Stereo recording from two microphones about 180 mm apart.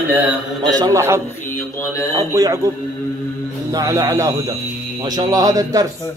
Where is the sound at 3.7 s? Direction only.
20° right (ahead or behind).